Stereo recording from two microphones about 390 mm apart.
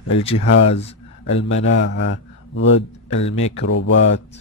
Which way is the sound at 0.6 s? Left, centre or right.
Centre.